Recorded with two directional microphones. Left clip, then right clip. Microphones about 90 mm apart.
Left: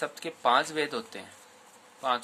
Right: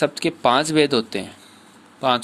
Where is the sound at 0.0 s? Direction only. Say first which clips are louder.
Right 10 dB; 30° right (ahead or behind).